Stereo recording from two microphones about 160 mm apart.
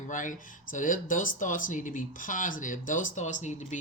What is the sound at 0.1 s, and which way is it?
Speech, 55° left (ahead or behind).